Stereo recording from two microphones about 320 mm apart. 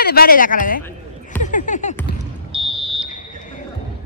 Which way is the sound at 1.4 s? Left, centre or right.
Left.